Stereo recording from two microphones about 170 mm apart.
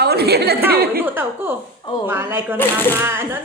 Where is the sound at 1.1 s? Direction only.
10° right (ahead or behind).